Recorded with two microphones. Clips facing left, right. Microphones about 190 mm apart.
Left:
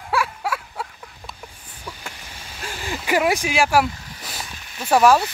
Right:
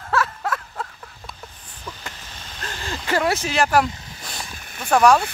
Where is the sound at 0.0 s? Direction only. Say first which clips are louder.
Even; 10° left (ahead or behind).